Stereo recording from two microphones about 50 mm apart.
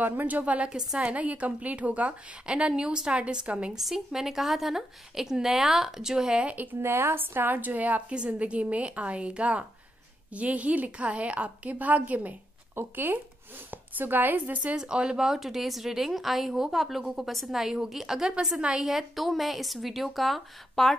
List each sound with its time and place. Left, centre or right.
0.0 s speech: right
0.7 s a woman's voice: centre
3.7 s speech: centre
6.4 s speech: right
6.8 s a woman's voice: right
12.7 s speech: right
14.8 s speech: centre
18.9 s speech: centre